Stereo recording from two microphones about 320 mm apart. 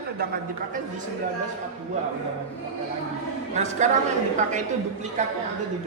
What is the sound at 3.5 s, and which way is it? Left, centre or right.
Speech, right.